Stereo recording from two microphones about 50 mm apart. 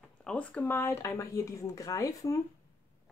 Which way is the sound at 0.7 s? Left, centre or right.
Left.